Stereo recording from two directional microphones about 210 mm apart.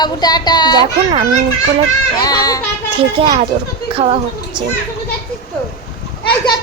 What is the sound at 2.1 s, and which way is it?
Speech, 20° left (ahead or behind).